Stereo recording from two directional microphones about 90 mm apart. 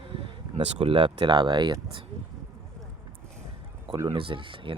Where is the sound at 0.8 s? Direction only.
70° right (ahead or behind); by 1.7 s 55° right (ahead or behind).